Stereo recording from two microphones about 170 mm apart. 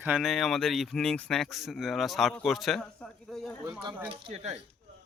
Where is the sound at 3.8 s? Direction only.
30° right (ahead or behind).